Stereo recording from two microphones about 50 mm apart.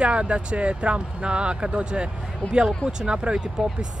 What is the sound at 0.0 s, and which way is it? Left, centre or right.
Speech, right.